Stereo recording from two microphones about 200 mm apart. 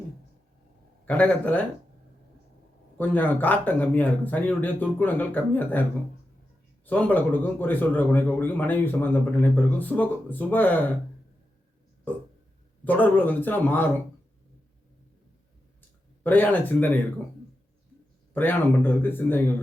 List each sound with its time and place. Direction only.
1.0 s speech: 5° left (ahead or behind)
3.0 s speech: 10° left (ahead or behind)
6.8 s speech: 10° left (ahead or behind)
12.8 s speech: 10° left (ahead or behind)
16.2 s speech: 10° left (ahead or behind)
18.3 s speech: 10° left (ahead or behind)